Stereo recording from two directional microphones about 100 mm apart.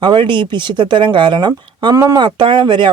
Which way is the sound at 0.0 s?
50° right (ahead or behind).